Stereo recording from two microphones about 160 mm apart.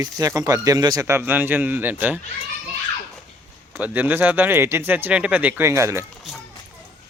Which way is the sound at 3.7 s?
10° right (ahead or behind).